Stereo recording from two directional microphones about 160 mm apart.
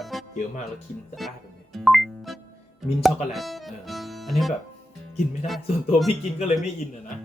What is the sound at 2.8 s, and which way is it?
Speech, centre (ahead or behind).